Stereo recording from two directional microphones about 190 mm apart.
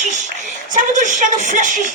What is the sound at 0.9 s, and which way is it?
Speech, 40° right (ahead or behind).